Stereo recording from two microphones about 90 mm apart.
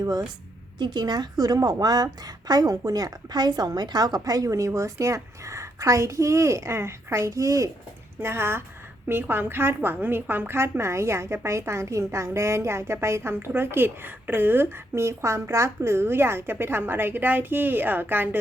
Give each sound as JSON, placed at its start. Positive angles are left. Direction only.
{"t": 0.0, "sound": "a woman's voice", "side_deg": -45}
{"t": 8.2, "sound": "a woman's voice", "side_deg": -25}